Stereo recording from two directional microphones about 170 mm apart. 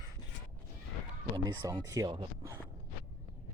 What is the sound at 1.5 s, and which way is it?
Speech, 25° right (ahead or behind).